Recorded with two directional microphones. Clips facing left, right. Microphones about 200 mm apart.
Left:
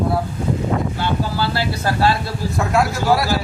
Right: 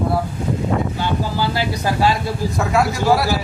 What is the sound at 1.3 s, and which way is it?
Speech, 15° right (ahead or behind).